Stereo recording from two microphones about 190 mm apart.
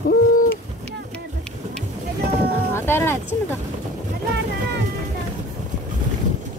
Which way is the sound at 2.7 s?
10° left (ahead or behind).